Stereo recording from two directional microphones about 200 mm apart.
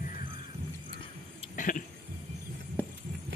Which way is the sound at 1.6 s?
40° left (ahead or behind).